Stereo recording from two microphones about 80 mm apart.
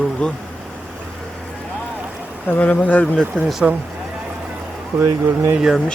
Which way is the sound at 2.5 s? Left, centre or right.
Centre.